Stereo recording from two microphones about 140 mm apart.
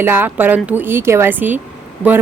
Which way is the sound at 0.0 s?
15° right (ahead or behind).